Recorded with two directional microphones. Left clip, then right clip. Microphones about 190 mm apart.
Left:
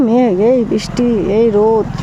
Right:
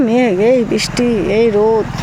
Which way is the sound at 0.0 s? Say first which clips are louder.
Left 1 dB; 15° left (ahead or behind).